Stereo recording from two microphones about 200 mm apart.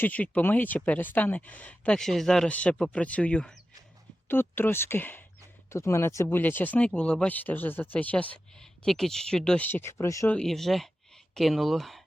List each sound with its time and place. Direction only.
0.0 s speech: 5° left (ahead or behind)
10.3 s speech: centre (ahead or behind)